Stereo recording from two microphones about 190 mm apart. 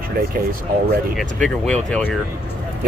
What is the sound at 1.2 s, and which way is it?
Speech, 5° left (ahead or behind).